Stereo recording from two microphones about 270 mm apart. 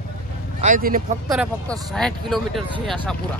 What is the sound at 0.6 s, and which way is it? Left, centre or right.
Speech, right.